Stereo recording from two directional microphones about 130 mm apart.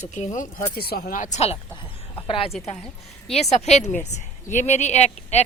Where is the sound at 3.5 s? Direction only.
60° left (ahead or behind).